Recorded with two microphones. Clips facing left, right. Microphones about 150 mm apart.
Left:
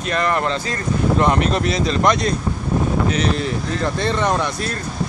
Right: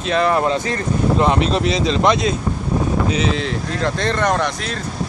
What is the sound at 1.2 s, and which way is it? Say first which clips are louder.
Speech: right 1 dB; 25° right (ahead or behind).